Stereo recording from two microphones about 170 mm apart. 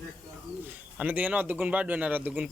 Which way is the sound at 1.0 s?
10° right (ahead or behind).